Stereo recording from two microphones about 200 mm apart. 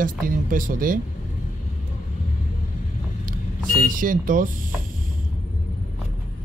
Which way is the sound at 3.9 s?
45° right (ahead or behind).